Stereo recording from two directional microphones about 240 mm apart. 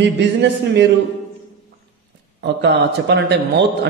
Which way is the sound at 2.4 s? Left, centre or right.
Right.